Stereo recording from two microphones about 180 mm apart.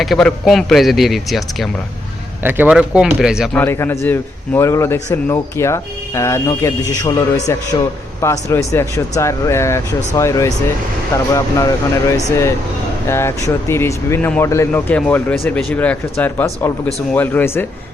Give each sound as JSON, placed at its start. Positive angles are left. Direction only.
{"t": 0.0, "sound": "speech", "side_deg": 0}
{"t": 2.4, "sound": "speech", "side_deg": -10}
{"t": 3.6, "sound": "a man's voice", "side_deg": 10}